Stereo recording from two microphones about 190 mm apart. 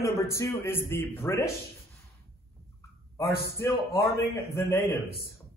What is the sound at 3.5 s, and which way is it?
Speech, 15° left (ahead or behind).